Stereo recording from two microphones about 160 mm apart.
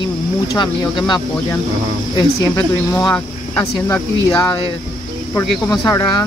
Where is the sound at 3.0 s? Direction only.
5° left (ahead or behind).